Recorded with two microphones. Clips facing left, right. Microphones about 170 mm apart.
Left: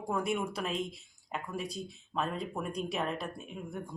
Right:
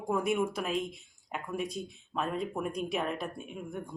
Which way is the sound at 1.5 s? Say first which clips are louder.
Right 5 dB; 35° left (ahead or behind).